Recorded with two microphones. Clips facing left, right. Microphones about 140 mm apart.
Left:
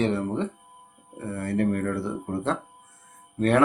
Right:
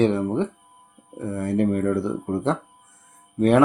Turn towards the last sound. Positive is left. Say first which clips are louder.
# right 4 dB
turn(degrees=-15)  # may be behind; listen again after turning